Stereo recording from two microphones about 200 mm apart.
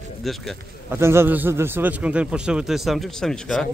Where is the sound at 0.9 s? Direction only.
10° right (ahead or behind).